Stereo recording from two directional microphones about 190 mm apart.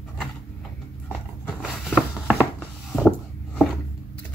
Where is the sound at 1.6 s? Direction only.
5° right (ahead or behind).